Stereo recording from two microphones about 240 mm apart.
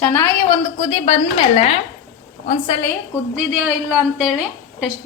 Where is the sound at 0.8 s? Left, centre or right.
Left.